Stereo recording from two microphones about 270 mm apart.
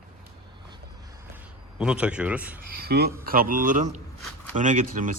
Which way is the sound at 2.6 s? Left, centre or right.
Right.